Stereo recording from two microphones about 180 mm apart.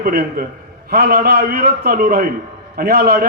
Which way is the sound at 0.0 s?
55° right (ahead or behind).